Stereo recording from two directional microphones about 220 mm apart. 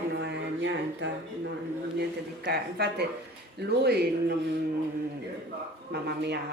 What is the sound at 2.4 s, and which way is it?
Speech, 45° right (ahead or behind).